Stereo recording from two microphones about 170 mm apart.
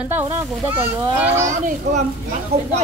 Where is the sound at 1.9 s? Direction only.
40° right (ahead or behind).